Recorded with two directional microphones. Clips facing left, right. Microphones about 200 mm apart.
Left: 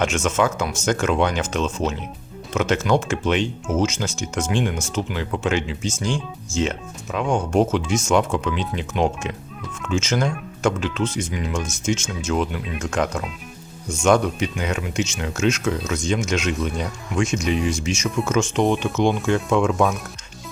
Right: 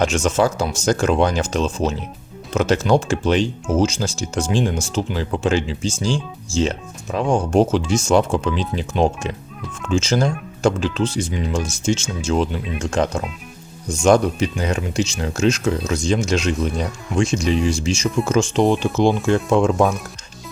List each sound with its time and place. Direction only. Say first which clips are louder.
0.0 s speech: right 3 dB; 35° right (ahead or behind)